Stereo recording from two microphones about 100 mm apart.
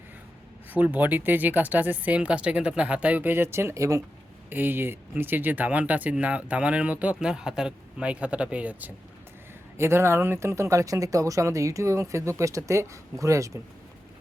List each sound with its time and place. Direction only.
0.7 s speech: 20° right (ahead or behind)
4.4 s speech: 20° right (ahead or behind)
9.7 s speech: 25° right (ahead or behind)